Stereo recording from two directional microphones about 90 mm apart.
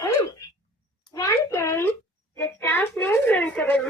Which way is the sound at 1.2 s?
35° left (ahead or behind).